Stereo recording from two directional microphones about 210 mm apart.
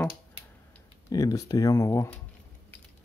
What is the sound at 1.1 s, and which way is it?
Speech, 15° left (ahead or behind).